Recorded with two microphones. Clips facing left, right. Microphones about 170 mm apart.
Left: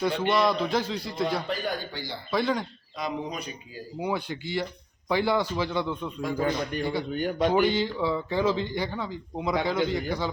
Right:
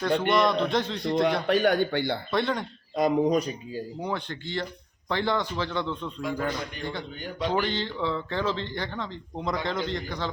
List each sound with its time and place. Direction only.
0.0 s a man's voice: 5° left (ahead or behind)
1.5 s a man's voice: 70° right (ahead or behind)
2.3 s a man's voice: centre (ahead or behind)
2.9 s speech: 45° right (ahead or behind)
4.0 s speech: 10° left (ahead or behind)
7.2 s speech: 50° left (ahead or behind)
7.5 s speech: 10° left (ahead or behind)